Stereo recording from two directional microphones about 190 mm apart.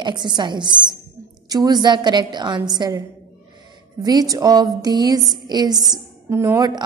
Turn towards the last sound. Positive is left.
turn(degrees=-15)  # may be behind; listen again after turning